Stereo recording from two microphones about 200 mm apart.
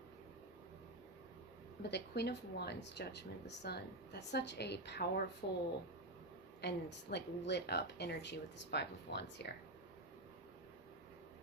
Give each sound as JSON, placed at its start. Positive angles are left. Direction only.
{"t": 1.8, "sound": "speech", "side_deg": 55}